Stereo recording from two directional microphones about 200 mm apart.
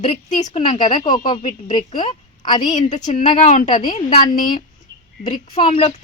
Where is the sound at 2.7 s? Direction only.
35° left (ahead or behind).